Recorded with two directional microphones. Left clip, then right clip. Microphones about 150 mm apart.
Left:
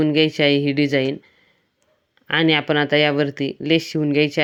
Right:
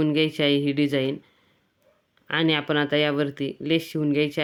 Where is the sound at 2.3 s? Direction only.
20° left (ahead or behind).